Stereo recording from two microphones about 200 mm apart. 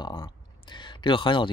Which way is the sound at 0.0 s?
25° left (ahead or behind).